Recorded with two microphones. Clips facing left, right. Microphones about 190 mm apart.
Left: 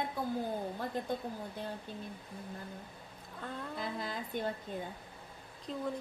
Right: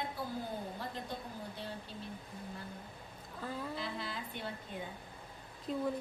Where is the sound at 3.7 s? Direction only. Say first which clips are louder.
Left 2 dB; 45° left (ahead or behind).